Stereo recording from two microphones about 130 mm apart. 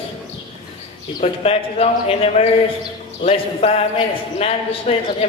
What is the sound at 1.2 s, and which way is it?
A man's voice, 50° left (ahead or behind).